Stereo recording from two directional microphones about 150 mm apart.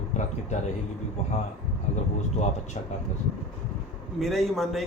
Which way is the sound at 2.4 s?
50° left (ahead or behind).